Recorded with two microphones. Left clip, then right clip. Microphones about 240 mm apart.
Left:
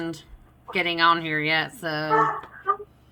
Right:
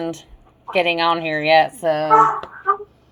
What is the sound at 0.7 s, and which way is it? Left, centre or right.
Speech, left.